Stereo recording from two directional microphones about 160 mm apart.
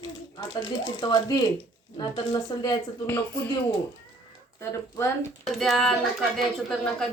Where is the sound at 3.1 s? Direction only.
10° left (ahead or behind).